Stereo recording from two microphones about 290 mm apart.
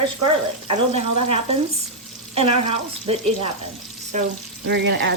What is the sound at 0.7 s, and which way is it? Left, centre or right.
Speech, right.